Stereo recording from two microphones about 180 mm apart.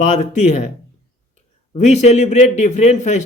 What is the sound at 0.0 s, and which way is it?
Speech, 45° left (ahead or behind).